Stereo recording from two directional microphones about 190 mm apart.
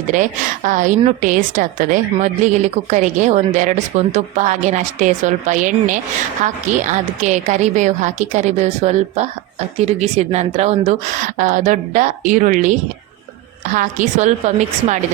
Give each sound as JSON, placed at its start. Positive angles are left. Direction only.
{"t": 0.1, "sound": "a woman's voice", "side_deg": -40}